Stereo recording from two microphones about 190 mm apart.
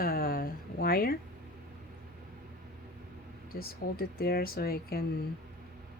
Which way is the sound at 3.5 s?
50° left (ahead or behind).